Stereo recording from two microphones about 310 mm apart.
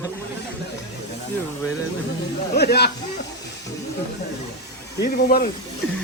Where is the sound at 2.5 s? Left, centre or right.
Left.